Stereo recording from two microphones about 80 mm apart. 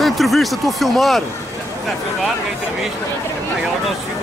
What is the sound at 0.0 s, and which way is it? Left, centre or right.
Speech, centre.